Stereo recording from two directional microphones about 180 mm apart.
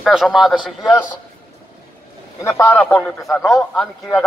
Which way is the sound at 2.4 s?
15° left (ahead or behind).